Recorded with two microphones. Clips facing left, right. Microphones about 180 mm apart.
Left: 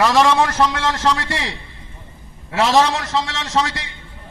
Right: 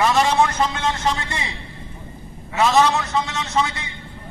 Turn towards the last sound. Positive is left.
turn(degrees=90)